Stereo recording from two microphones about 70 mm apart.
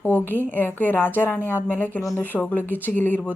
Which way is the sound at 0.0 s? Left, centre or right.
Left.